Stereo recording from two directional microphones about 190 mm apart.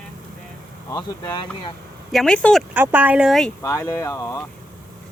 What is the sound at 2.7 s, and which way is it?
Speech, 10° right (ahead or behind).